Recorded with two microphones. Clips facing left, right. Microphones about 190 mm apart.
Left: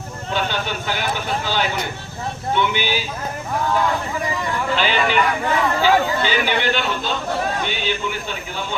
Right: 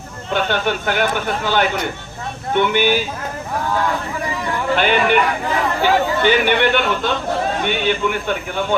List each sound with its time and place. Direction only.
0.3 s speech: 55° right (ahead or behind)
4.7 s speech: 55° right (ahead or behind)